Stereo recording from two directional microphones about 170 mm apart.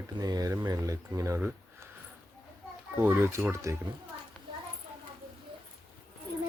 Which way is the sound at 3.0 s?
15° right (ahead or behind).